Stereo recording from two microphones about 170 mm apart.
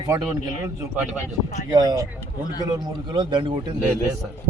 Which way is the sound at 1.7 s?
25° right (ahead or behind).